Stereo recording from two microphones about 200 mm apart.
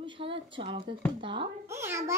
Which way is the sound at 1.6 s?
15° right (ahead or behind).